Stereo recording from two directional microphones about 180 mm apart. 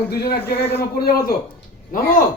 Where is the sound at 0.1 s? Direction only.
60° left (ahead or behind).